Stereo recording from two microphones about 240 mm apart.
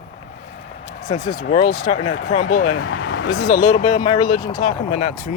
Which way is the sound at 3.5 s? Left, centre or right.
Left.